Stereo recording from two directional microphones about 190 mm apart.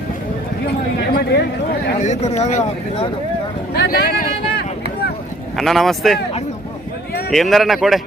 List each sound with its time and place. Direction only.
1.1 s speech: 60° left (ahead or behind)
2.0 s speech: 35° left (ahead or behind)
3.8 s speech: 50° left (ahead or behind)
5.5 s speech: centre (ahead or behind)
7.3 s speech: centre (ahead or behind)